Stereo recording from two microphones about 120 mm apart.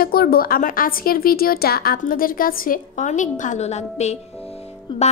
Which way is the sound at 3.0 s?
90° left.